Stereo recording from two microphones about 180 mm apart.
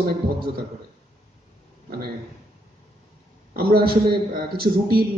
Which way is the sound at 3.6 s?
55° right (ahead or behind).